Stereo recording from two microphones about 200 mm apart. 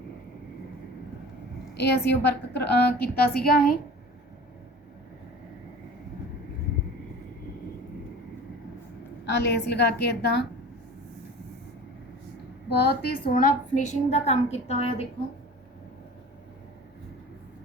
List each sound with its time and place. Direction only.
1.7 s a woman's voice: 55° left (ahead or behind)
9.2 s a woman's voice: 60° left (ahead or behind)
12.7 s a woman's voice: 50° left (ahead or behind); by 15.0 s 30° left (ahead or behind)